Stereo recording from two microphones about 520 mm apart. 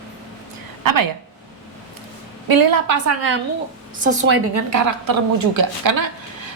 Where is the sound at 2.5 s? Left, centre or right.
Right.